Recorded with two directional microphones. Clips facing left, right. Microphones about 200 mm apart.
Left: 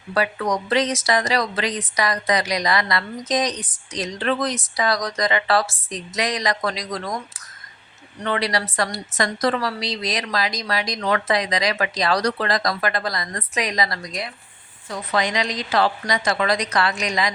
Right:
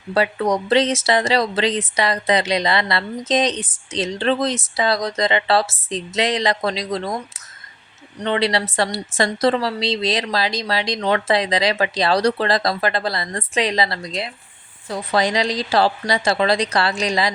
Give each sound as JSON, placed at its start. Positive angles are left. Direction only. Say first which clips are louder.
{"t": 0.1, "sound": "a woman's voice", "louder": "right 3 dB", "side_deg": -25}
{"t": 8.2, "sound": "a woman's voice", "louder": "right 4 dB", "side_deg": -25}